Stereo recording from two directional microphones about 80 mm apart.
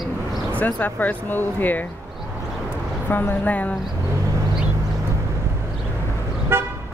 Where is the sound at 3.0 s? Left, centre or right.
Left.